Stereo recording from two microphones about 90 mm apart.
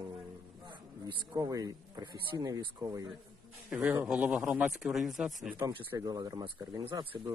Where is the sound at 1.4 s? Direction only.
40° right (ahead or behind).